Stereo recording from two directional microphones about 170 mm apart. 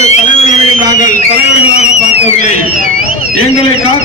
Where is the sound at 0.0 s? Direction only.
40° left (ahead or behind).